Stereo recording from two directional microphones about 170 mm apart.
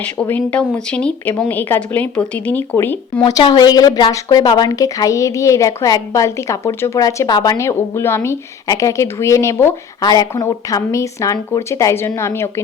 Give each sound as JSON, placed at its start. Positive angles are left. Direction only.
{"t": 0.0, "sound": "speech", "side_deg": 10}
{"t": 3.2, "sound": "a woman's voice", "side_deg": 30}